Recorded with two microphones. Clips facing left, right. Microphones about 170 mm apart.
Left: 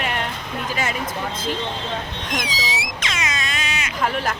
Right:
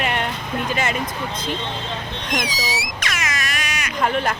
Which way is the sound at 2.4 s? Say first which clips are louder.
Right 1 dB; 25° left (ahead or behind).